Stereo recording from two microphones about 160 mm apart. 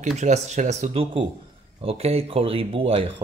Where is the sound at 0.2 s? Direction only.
45° right (ahead or behind).